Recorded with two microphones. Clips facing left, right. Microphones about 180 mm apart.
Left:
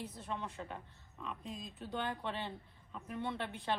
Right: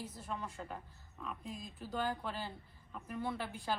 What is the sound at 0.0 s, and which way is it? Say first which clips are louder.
Speech: left 1 dB; centre (ahead or behind).